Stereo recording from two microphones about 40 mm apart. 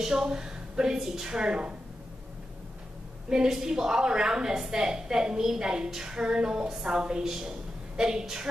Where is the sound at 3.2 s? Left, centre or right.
Centre.